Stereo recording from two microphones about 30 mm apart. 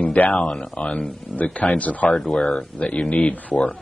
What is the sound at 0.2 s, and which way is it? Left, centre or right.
Speech, left.